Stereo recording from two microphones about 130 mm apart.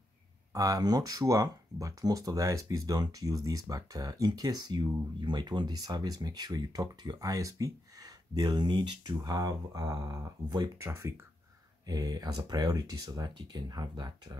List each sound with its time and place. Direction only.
0.5 s speech: 25° right (ahead or behind)